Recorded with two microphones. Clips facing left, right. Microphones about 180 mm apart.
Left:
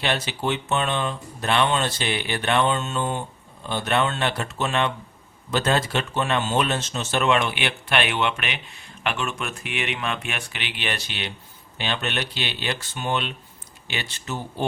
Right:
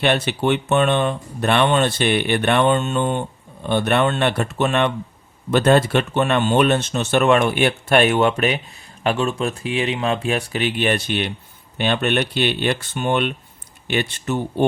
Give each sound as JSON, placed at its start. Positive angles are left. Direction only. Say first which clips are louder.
{"t": 0.0, "sound": "speech", "louder": "right 7 dB", "side_deg": -60}